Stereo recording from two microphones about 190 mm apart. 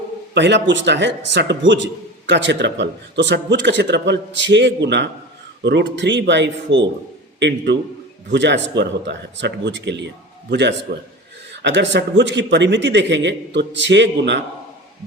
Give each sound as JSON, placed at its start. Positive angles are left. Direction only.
{"t": 0.3, "sound": "a man's voice", "side_deg": -70}